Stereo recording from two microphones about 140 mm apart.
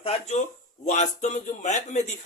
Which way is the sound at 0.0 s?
50° left (ahead or behind).